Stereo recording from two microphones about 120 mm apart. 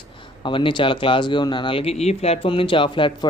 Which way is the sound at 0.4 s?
45° left (ahead or behind).